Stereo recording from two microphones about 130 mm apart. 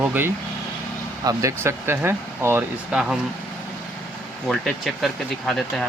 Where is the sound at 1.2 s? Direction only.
25° right (ahead or behind).